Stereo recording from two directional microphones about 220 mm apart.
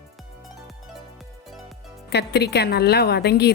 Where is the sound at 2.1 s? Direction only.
50° left (ahead or behind).